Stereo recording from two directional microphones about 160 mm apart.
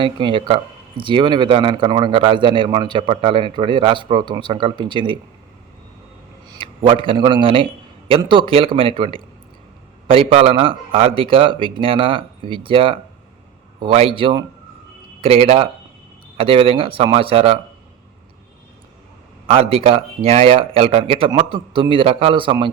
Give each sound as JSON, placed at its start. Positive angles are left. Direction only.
{"t": 0.0, "sound": "a man's voice", "side_deg": -30}
{"t": 6.5, "sound": "a man's voice", "side_deg": -30}
{"t": 19.5, "sound": "a man's voice", "side_deg": -40}